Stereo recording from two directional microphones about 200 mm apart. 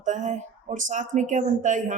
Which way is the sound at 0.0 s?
40° right (ahead or behind).